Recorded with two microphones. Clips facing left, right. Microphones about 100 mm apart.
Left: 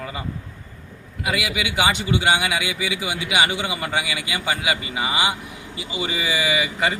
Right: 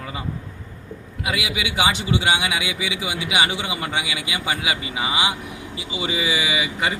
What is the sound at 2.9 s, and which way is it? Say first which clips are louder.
Speech: even; 20° right (ahead or behind).